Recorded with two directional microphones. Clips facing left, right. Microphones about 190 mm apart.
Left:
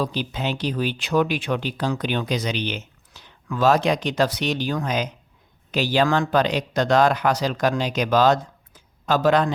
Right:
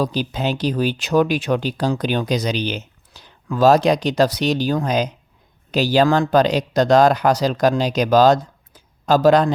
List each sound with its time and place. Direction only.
0.0 s speech: 40° right (ahead or behind)